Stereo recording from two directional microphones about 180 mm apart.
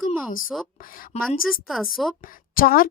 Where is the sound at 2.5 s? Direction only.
55° left (ahead or behind).